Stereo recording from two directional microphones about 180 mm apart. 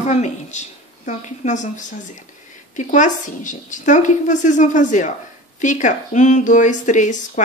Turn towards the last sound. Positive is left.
turn(degrees=45)  # may be behind; listen again after turning